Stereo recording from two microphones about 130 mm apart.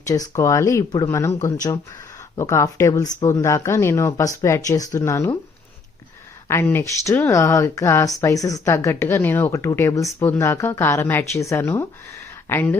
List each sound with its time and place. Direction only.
0.1 s speech: 25° left (ahead or behind)
6.5 s speech: 20° left (ahead or behind)